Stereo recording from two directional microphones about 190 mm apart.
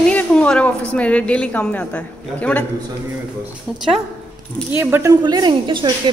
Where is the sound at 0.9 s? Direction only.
5° left (ahead or behind).